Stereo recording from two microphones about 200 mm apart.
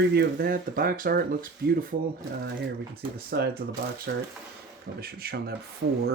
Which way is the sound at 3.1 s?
50° right (ahead or behind).